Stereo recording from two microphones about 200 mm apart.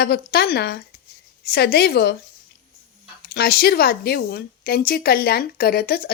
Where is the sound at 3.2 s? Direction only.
50° left (ahead or behind).